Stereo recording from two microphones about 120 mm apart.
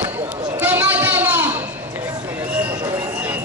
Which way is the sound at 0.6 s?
15° right (ahead or behind).